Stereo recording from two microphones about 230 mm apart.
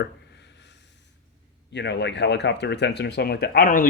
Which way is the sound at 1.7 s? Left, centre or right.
Left.